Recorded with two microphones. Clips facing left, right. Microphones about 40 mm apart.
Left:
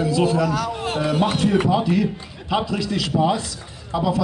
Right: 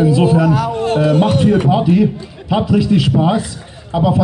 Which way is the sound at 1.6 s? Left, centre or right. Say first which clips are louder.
Right 6 dB; right.